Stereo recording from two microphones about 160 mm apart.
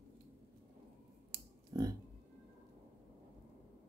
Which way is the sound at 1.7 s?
25° right (ahead or behind).